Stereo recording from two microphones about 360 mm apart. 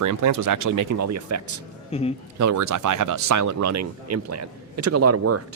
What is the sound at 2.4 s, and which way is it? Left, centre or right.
Speech, right.